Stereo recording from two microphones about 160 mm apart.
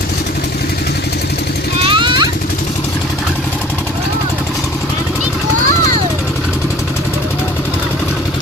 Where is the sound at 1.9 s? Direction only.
30° right (ahead or behind).